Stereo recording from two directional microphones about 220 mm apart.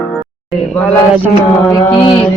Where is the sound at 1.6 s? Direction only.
15° left (ahead or behind).